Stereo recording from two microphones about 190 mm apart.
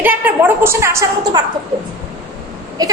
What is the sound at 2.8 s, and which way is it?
Speech, 20° right (ahead or behind).